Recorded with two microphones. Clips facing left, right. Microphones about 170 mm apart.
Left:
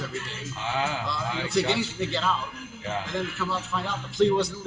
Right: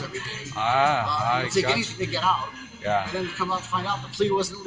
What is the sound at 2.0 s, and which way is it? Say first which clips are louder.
A man's voice: right 3 dB; 5° right (ahead or behind).